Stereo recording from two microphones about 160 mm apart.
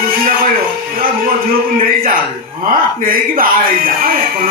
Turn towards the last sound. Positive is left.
turn(degrees=-65)  # may be behind; listen again after turning